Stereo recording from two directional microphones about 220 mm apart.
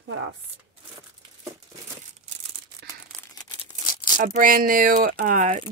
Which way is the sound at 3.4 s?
20° left (ahead or behind).